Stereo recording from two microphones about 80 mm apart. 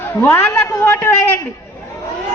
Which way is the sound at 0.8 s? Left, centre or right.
Left.